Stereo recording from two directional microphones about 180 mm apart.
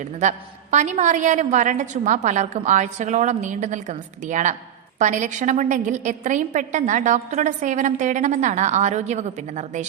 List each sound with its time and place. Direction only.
0.0 s a woman's voice: 40° right (ahead or behind)